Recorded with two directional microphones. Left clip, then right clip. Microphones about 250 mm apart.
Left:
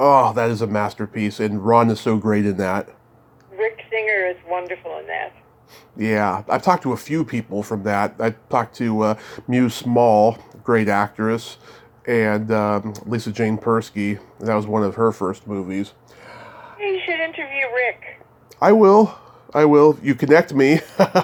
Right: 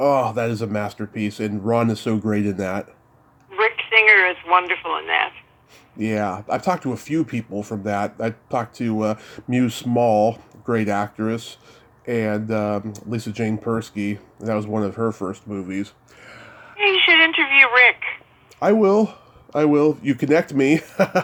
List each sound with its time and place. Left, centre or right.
0.0 s speech: centre
3.5 s a sound: right
4.3 s speech: right
6.0 s speech: centre
17.0 s a sound: right
18.6 s speech: centre